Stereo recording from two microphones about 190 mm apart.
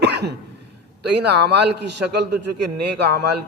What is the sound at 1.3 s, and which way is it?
A man's voice, 60° right (ahead or behind).